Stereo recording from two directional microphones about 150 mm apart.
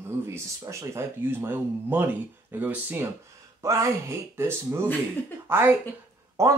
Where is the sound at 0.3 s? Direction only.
20° right (ahead or behind).